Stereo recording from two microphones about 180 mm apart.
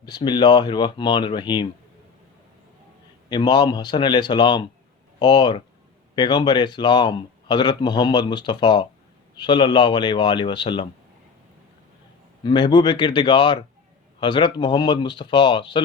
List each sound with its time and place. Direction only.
0.0 s speech: 25° left (ahead or behind)
3.2 s speech: 25° left (ahead or behind)
12.5 s speech: 25° left (ahead or behind)